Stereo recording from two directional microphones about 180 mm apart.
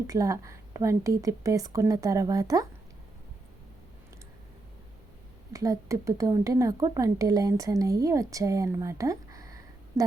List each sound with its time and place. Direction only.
0.1 s speech: 20° right (ahead or behind)
5.5 s speech: 20° right (ahead or behind)